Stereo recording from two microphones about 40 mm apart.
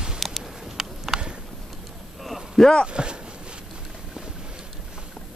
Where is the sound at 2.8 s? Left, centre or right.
Right.